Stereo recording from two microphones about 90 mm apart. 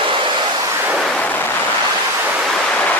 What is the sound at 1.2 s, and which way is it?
Waves, 20° left (ahead or behind).